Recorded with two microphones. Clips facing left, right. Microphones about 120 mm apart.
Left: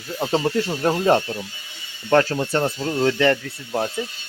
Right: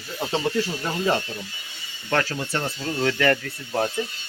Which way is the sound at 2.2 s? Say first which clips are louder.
Left 6 dB; 40° left (ahead or behind).